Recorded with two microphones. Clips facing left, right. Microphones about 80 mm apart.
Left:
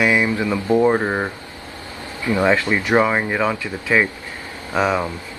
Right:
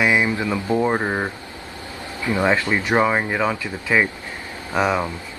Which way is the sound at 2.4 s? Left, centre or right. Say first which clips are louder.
Left 2 dB; centre.